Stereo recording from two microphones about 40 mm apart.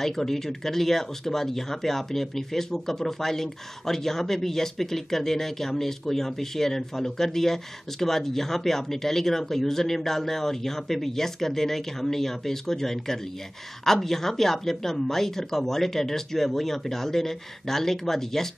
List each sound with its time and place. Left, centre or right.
0.0 s speech: centre